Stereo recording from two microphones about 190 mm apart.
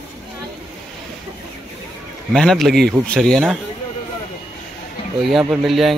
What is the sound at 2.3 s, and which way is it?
Speech, centre (ahead or behind).